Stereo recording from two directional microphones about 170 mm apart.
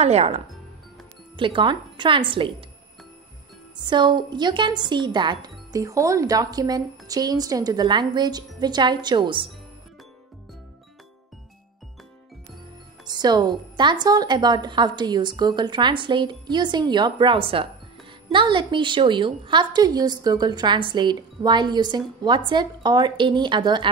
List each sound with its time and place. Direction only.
0.0 s speech: 40° right (ahead or behind)
3.7 s speech: 25° right (ahead or behind)
13.0 s speech: 25° right (ahead or behind)